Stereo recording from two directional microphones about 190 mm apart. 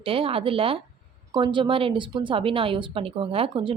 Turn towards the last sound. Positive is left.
turn(degrees=-30)  # may be behind; listen again after turning